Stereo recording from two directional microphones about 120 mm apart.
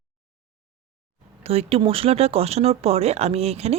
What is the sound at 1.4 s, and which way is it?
Speech, 55° right (ahead or behind).